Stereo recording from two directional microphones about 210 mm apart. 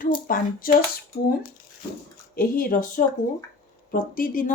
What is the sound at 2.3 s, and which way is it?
Speech, 45° left (ahead or behind).